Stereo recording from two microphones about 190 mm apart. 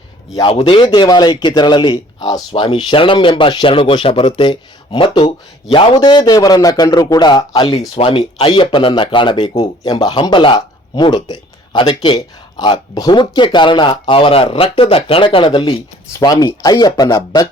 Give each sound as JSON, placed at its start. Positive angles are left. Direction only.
{"t": 0.3, "sound": "a man's voice", "side_deg": 25}